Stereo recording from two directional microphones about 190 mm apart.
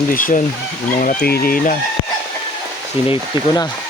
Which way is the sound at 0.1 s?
45° left (ahead or behind).